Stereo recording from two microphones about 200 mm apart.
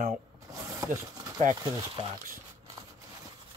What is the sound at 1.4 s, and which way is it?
Speech, 30° right (ahead or behind).